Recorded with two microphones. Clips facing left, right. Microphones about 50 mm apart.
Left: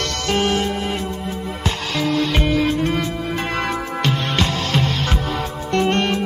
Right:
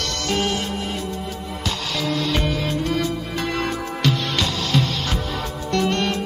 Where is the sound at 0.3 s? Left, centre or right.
Left.